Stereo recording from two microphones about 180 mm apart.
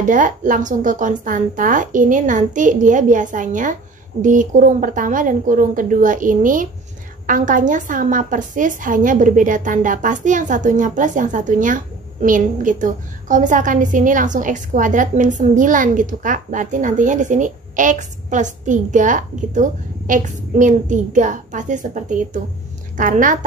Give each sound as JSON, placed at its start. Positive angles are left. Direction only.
{"t": 0.0, "sound": "a woman's voice", "side_deg": -45}